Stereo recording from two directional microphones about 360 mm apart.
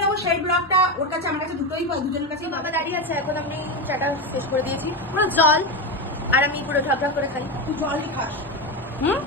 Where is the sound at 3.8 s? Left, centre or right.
Centre.